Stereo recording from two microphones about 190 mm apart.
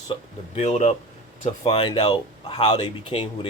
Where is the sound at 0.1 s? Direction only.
35° left (ahead or behind).